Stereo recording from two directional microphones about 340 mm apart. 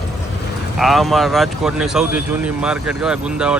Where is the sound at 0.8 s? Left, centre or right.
Centre.